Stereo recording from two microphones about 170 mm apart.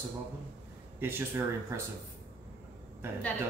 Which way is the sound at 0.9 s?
10° right (ahead or behind).